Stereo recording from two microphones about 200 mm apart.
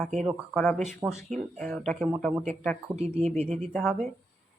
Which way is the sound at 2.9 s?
35° right (ahead or behind).